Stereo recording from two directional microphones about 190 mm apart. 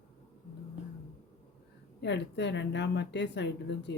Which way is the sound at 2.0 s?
65° left (ahead or behind).